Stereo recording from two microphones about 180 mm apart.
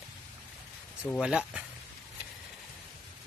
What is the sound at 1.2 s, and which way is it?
Speech, 5° right (ahead or behind).